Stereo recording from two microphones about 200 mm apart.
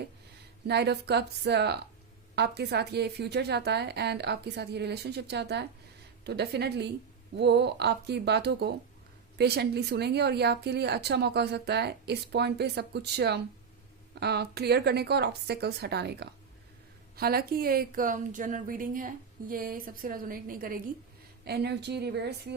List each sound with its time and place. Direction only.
0.7 s a woman's voice: 55° right (ahead or behind)